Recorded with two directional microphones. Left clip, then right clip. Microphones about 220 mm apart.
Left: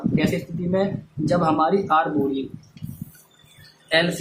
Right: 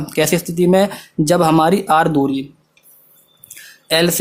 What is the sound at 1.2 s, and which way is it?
Speech, 50° right (ahead or behind).